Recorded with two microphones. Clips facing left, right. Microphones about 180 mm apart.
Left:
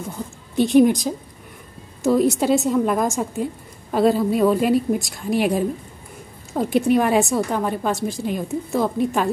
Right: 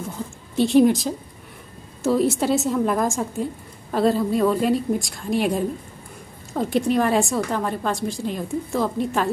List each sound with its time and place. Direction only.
0.7 s a woman's voice: centre (ahead or behind)